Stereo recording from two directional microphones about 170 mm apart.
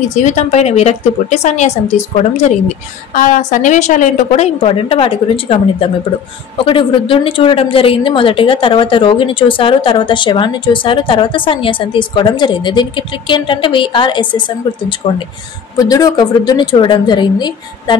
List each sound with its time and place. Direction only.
0.1 s a woman's voice: 45° left (ahead or behind)
4.6 s a woman's voice: 30° left (ahead or behind)